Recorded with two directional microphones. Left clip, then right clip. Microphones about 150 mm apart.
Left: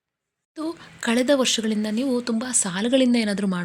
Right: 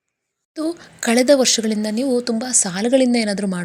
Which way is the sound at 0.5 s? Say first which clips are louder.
Right 6 dB; 15° right (ahead or behind).